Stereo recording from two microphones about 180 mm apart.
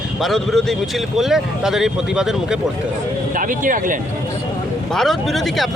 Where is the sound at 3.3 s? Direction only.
50° right (ahead or behind).